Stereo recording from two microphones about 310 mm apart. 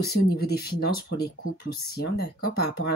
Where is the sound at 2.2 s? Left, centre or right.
Left.